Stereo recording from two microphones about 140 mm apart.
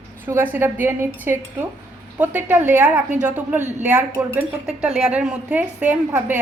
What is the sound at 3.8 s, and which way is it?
A woman's voice, 10° right (ahead or behind).